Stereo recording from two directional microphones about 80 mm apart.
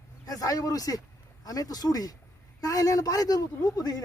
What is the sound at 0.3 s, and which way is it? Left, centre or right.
A man's voice, left.